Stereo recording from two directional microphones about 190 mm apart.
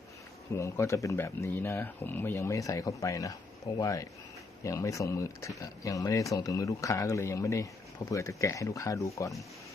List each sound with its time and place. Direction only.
0.5 s speech: 15° left (ahead or behind)